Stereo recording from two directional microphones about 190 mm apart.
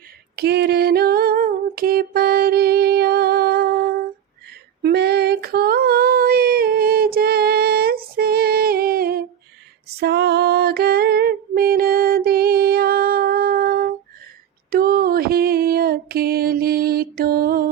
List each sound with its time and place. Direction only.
0.3 s a sound: 60° right (ahead or behind)
4.8 s female singing: 60° right (ahead or behind)
10.0 s music: 60° right (ahead or behind)